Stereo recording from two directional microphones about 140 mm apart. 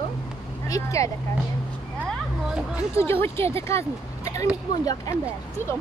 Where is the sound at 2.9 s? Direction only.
15° left (ahead or behind).